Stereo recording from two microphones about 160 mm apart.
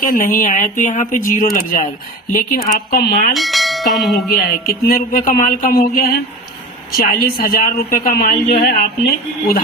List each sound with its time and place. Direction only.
0.0 s speech: 60° left (ahead or behind)
3.3 s bell: centre (ahead or behind)
4.4 s speech: 70° left (ahead or behind)